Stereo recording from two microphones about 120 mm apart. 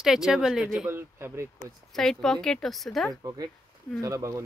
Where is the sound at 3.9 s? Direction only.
30° right (ahead or behind).